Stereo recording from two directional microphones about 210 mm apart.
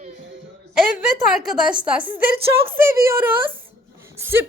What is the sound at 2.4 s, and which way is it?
Speech, 25° right (ahead or behind).